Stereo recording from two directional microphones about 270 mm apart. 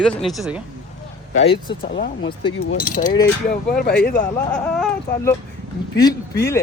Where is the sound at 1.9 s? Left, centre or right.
Left.